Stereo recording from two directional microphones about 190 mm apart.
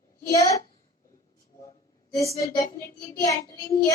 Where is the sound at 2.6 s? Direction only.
15° left (ahead or behind).